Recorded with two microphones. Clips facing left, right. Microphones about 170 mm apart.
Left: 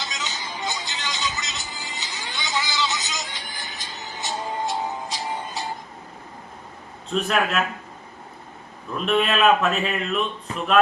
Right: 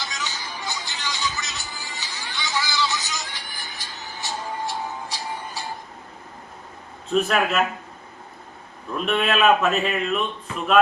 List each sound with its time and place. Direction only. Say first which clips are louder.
0.0 s music: even; 20° left (ahead or behind)
7.1 s speech: right 2 dB; centre (ahead or behind)
9.0 s speech: even; centre (ahead or behind)